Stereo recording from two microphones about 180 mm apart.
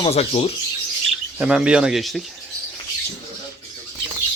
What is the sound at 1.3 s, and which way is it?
Speech, 5° right (ahead or behind).